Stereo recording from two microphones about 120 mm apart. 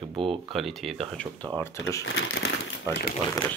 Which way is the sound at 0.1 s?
50° right (ahead or behind).